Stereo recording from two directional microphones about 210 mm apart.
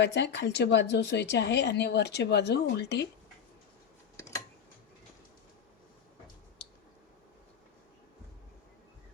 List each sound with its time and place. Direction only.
0.0 s a woman's voice: 55° left (ahead or behind)